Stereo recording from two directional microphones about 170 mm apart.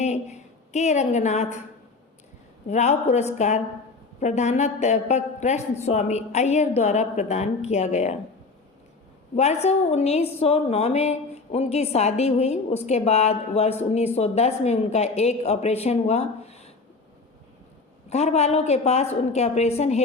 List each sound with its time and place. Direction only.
0.0 s a woman's voice: 40° left (ahead or behind)
2.6 s a woman's voice: 40° left (ahead or behind)
9.3 s a woman's voice: 40° left (ahead or behind)
18.1 s a woman's voice: 40° left (ahead or behind)